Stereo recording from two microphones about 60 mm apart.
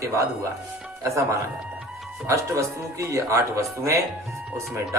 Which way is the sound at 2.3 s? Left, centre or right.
Right.